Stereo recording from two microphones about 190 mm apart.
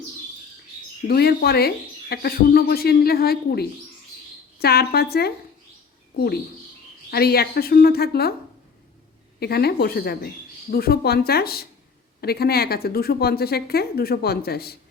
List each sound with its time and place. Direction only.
1.0 s speech: 55° left (ahead or behind)
9.4 s speech: 55° left (ahead or behind)